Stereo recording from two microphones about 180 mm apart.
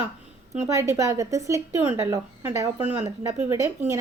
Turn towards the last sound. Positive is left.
turn(degrees=-15)  # may be behind; listen again after turning